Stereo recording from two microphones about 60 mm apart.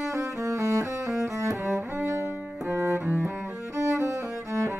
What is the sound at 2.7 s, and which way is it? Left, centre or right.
Cello, right.